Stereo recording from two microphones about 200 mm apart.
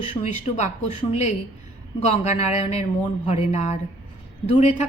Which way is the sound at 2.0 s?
35° left (ahead or behind).